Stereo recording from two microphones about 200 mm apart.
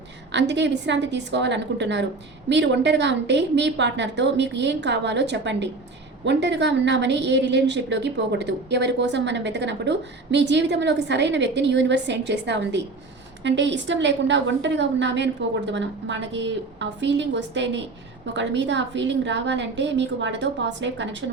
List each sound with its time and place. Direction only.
0.3 s a woman's voice: 60° right (ahead or behind)